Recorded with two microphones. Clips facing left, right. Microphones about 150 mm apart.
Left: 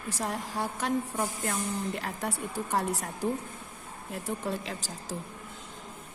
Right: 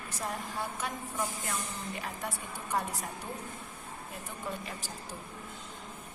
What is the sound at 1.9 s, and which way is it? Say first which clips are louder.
A woman's voice: left 4 dB; 75° left (ahead or behind).